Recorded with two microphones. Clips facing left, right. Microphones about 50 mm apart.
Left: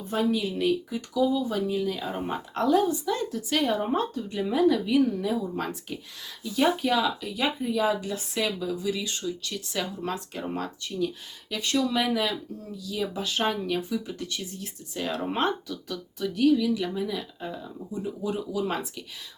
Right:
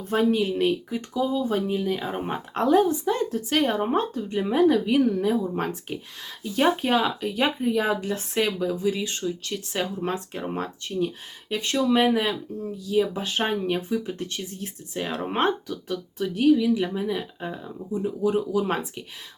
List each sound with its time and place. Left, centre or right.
0.1 s speech: right